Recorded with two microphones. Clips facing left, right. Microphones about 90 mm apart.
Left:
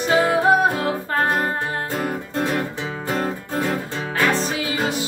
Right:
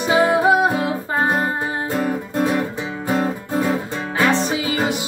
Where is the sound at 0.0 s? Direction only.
15° right (ahead or behind).